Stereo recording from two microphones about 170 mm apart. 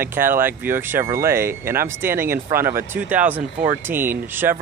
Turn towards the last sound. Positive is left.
turn(degrees=-10)  # may be behind; listen again after turning